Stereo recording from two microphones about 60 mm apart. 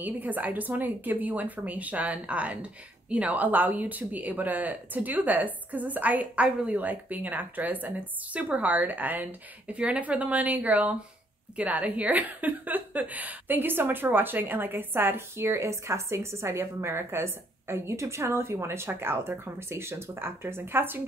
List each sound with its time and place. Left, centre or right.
0.0 s a woman's voice: right